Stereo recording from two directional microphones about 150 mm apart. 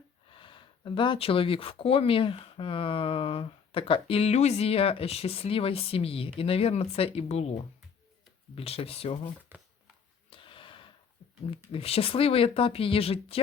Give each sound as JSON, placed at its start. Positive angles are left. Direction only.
{"t": 0.3, "sound": "speech", "side_deg": 35}
{"t": 8.5, "sound": "speech", "side_deg": 40}
{"t": 9.5, "sound": "a sound", "side_deg": -15}
{"t": 10.2, "sound": "snort", "side_deg": 35}
{"t": 11.7, "sound": "speech", "side_deg": 40}